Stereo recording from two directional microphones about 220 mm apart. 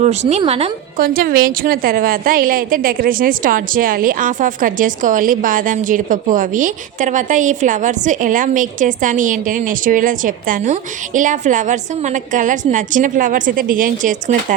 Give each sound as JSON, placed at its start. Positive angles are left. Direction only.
{"t": 0.0, "sound": "speech", "side_deg": -30}
{"t": 0.9, "sound": "a woman's voice", "side_deg": -40}